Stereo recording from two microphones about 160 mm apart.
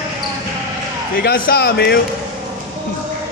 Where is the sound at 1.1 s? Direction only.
65° left (ahead or behind); by 2.0 s 85° left.